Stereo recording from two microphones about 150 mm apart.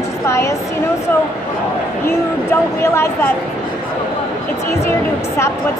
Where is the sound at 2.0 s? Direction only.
15° left (ahead or behind).